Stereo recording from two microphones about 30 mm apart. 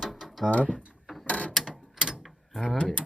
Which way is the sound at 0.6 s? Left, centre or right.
Right.